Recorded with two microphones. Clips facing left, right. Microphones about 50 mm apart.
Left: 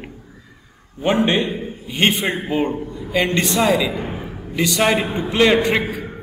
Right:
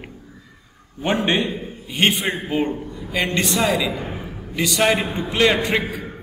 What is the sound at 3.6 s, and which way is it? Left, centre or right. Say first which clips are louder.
Speech: left 5 dB; centre.